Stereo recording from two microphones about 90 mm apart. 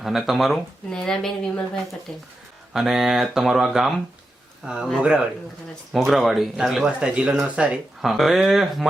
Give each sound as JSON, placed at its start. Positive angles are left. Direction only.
{"t": 0.0, "sound": "speech", "side_deg": 0}
{"t": 2.7, "sound": "speech", "side_deg": -5}
{"t": 8.0, "sound": "speech", "side_deg": 0}